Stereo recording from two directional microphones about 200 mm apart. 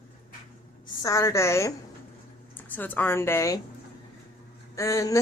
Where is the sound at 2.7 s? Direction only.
10° left (ahead or behind).